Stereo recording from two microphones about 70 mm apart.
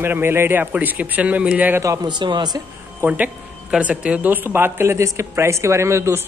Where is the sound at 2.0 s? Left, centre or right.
Right.